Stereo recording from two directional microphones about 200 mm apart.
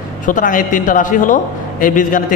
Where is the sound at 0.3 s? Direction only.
40° left (ahead or behind).